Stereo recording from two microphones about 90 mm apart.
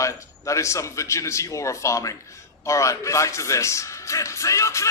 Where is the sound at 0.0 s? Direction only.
35° left (ahead or behind).